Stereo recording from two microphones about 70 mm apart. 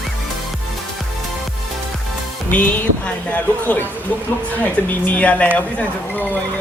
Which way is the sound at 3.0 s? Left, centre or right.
Centre.